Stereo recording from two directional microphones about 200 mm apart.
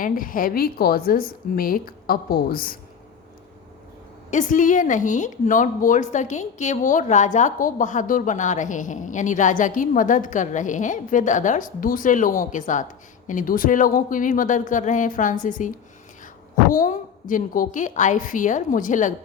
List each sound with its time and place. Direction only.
0.0 s a woman's voice: 45° left (ahead or behind)
4.3 s a woman's voice: 40° left (ahead or behind)
16.7 s a woman's voice: 40° left (ahead or behind)